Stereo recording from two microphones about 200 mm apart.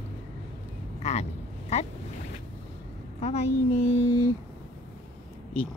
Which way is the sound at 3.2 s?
30° left (ahead or behind).